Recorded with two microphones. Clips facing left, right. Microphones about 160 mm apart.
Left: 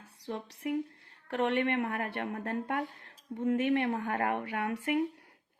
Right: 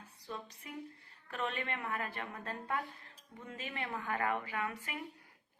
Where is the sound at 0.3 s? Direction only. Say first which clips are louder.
Left 11 dB; 80° left.